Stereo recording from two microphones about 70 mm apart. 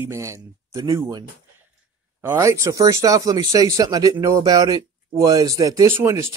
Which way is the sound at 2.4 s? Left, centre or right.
Right.